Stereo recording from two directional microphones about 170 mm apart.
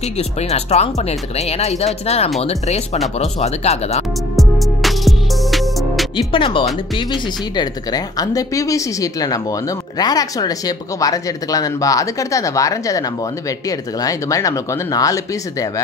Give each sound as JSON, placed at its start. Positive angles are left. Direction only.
{"t": 0.4, "sound": "speech", "side_deg": 40}
{"t": 4.4, "sound": "music", "side_deg": 0}
{"t": 6.1, "sound": "speech", "side_deg": 30}